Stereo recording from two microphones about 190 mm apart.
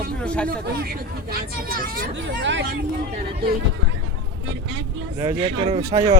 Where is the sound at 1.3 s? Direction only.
50° right (ahead or behind).